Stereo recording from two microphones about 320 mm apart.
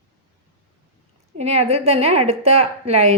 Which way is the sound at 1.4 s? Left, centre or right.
Centre.